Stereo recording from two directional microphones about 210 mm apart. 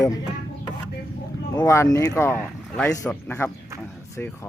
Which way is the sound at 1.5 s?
15° left (ahead or behind).